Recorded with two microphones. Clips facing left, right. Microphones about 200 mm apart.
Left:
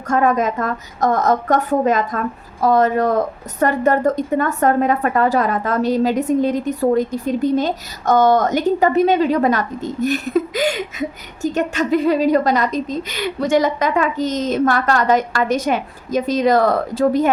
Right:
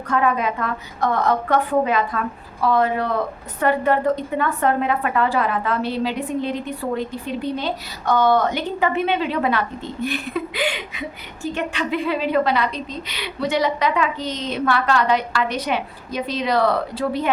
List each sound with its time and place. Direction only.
0.1 s a woman's voice: 45° left (ahead or behind)